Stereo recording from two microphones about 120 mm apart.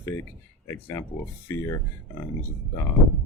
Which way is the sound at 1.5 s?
25° left (ahead or behind).